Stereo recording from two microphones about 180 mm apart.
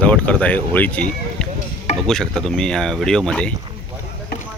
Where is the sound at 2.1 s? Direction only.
5° left (ahead or behind).